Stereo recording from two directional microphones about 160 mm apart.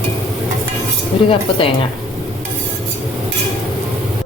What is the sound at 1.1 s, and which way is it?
Speech, 35° left (ahead or behind).